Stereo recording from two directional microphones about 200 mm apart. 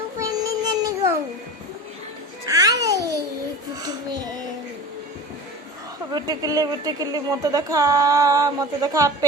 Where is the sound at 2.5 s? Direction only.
20° right (ahead or behind).